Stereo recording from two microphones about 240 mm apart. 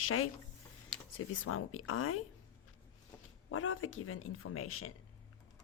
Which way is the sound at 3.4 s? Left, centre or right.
Left.